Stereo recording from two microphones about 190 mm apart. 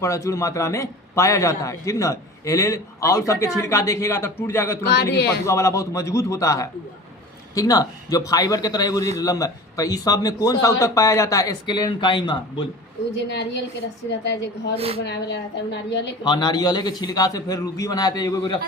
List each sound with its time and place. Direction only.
0.0 s a man's voice: 15° left (ahead or behind)
5.1 s a woman's voice: 60° left (ahead or behind)
5.5 s a man's voice: 15° left (ahead or behind)
13.1 s a woman's voice: 65° left (ahead or behind)
16.2 s a man's voice: 20° left (ahead or behind)